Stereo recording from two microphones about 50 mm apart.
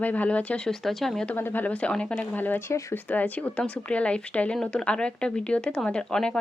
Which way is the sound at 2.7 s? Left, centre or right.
Left.